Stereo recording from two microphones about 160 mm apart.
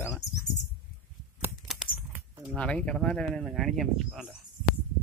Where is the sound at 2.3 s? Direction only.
10° right (ahead or behind).